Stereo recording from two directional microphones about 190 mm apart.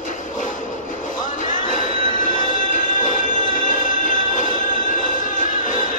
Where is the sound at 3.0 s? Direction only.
45° left (ahead or behind).